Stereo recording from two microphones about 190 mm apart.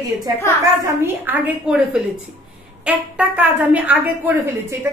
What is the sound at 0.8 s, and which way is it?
Speech, 10° right (ahead or behind).